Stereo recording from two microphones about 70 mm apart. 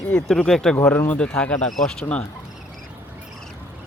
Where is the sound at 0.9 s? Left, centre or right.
Left.